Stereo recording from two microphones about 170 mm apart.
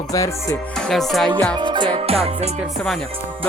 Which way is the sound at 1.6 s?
25° right (ahead or behind).